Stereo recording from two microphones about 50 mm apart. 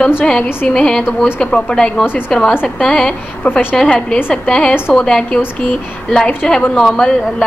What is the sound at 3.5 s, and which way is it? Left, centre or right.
Speech, left.